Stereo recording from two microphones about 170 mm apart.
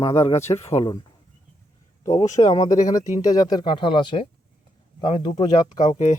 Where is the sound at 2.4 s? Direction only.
20° left (ahead or behind).